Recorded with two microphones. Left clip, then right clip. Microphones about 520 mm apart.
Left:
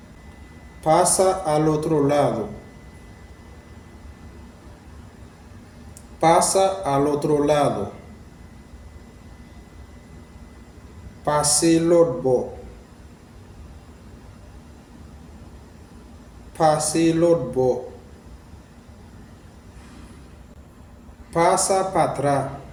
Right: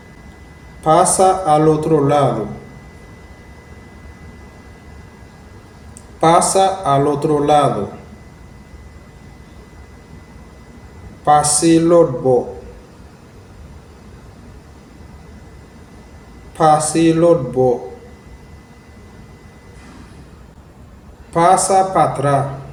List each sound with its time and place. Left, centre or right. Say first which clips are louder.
0.9 s a man's voice: right 6 dB; left
6.1 s a man's voice: right 5 dB; left
11.3 s a man's voice: right 7 dB; left
16.6 s a man's voice: right 6 dB; left
21.3 s a man's voice: right 7 dB; left